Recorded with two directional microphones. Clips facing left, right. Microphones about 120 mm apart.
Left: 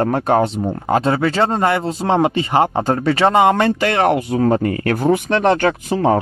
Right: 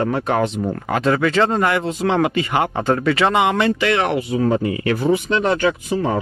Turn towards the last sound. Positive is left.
turn(degrees=55)  # may be behind; listen again after turning